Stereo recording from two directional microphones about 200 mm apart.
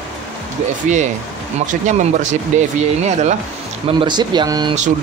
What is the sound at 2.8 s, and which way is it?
Speech, 35° right (ahead or behind).